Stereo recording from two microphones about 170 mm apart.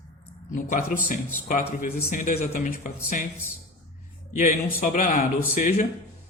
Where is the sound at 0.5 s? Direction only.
50° left (ahead or behind).